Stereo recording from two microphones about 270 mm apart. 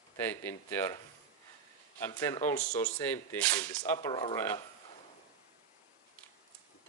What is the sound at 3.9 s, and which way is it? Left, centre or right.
Speech, centre.